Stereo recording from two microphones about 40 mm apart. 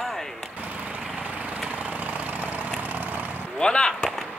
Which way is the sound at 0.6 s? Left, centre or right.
Right.